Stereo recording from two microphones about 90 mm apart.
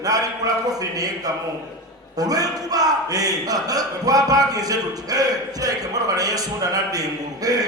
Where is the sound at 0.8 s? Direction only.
40° right (ahead or behind).